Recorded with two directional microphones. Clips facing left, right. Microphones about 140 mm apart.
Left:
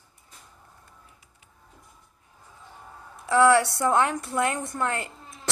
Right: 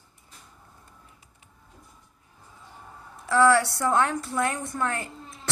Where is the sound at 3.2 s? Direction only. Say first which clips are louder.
Left 1 dB; 20° left (ahead or behind).